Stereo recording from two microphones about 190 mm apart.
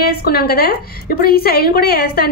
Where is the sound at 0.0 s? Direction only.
55° left (ahead or behind).